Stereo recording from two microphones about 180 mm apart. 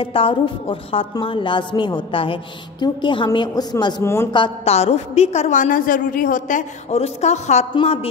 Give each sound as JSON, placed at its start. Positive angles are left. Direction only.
{"t": 0.0, "sound": "a woman's voice", "side_deg": 30}
{"t": 4.3, "sound": "a woman's voice", "side_deg": 30}